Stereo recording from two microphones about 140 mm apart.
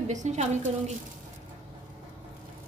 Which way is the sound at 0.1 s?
55° right (ahead or behind).